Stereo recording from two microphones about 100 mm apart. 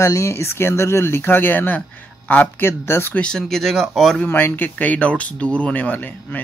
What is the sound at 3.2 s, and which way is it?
Speech, 5° left (ahead or behind).